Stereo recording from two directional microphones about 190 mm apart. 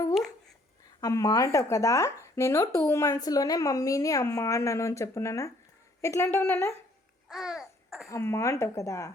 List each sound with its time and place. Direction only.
1.0 s speech: 20° left (ahead or behind)
7.3 s babbling: centre (ahead or behind)
8.1 s speech: 15° left (ahead or behind)